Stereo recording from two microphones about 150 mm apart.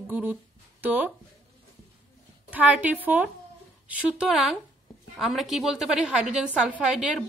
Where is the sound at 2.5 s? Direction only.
10° right (ahead or behind).